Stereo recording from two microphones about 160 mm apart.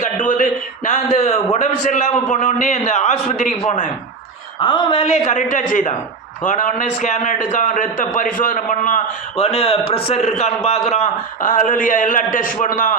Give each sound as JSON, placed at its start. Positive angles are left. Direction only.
{"t": 0.0, "sound": "a sound", "side_deg": 50}
{"t": 1.1, "sound": "a man's voice", "side_deg": 45}
{"t": 4.6, "sound": "a man's voice", "side_deg": 30}
{"t": 5.3, "sound": "a man's voice", "side_deg": 50}
{"t": 9.4, "sound": "a man's voice", "side_deg": 40}